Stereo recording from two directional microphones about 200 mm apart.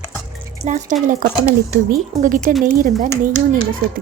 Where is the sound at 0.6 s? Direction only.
35° right (ahead or behind).